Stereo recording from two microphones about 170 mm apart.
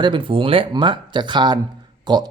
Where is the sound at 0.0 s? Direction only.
30° right (ahead or behind).